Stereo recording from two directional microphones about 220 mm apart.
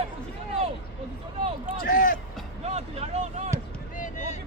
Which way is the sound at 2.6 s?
30° right (ahead or behind).